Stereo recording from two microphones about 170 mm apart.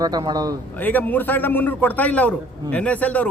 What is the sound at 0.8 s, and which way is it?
A man's voice, 10° left (ahead or behind).